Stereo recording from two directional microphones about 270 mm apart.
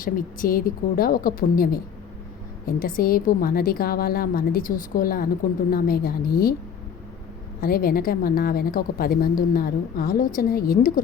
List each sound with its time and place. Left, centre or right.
0.0 s a woman's voice: left
7.6 s a woman's voice: left